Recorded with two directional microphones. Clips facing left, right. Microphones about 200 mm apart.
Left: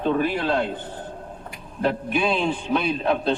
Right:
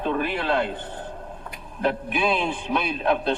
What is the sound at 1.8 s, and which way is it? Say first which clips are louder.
A man's voice: left 1 dB; centre (ahead or behind).